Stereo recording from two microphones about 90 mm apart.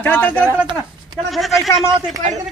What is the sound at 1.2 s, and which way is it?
Speech, centre (ahead or behind).